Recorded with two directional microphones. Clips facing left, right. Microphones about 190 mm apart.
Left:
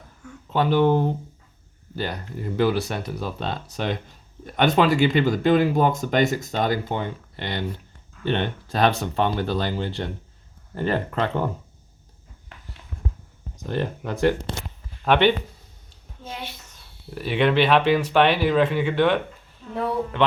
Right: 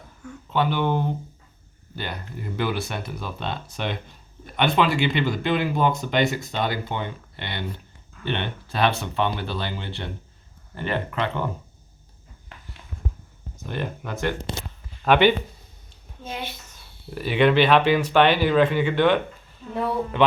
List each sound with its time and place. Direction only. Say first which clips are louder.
0.5 s speech: left 4 dB; 40° left (ahead or behind)
13.6 s speech: left 4 dB; 35° left (ahead or behind)
15.0 s speech: right 1 dB; 5° right (ahead or behind)
16.7 s speech: right 1 dB; centre (ahead or behind)